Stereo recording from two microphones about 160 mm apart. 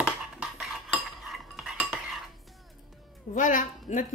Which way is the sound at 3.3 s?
55° left (ahead or behind).